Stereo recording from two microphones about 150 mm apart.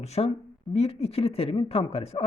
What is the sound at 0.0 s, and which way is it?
Speech, 45° left (ahead or behind).